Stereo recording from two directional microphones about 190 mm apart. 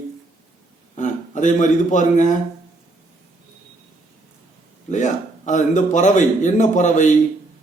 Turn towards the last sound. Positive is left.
turn(degrees=40)  # may be behind; listen again after turning